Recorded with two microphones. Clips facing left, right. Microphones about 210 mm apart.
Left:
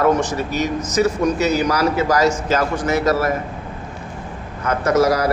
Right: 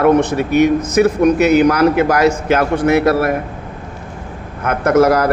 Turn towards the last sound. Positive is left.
turn(degrees=-55)  # may be behind; listen again after turning